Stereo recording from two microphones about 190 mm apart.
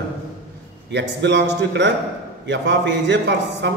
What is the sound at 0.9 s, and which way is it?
A man's voice, 65° right (ahead or behind).